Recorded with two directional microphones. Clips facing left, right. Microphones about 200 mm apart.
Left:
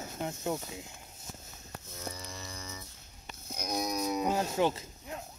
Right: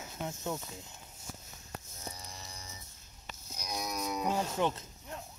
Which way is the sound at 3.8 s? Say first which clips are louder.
Left 4 dB; 35° left (ahead or behind).